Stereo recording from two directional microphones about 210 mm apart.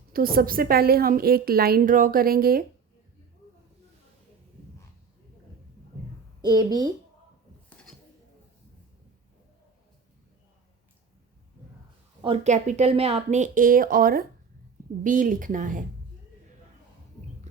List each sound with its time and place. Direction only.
0.1 s a woman's voice: 45° right (ahead or behind)
6.4 s speech: 20° right (ahead or behind)
12.2 s speech: 30° right (ahead or behind)